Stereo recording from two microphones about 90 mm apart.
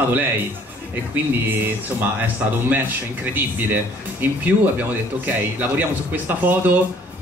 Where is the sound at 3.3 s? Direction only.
20° right (ahead or behind).